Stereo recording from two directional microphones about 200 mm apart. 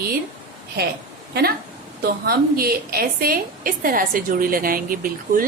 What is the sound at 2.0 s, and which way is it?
A woman's voice, 50° right (ahead or behind).